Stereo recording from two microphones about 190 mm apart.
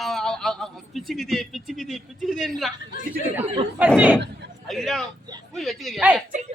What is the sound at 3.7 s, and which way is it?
Chatter, 10° right (ahead or behind).